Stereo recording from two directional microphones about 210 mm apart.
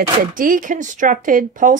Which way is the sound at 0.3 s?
40° right (ahead or behind).